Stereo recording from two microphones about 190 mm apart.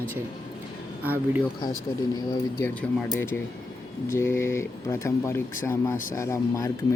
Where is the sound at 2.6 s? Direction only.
5° left (ahead or behind).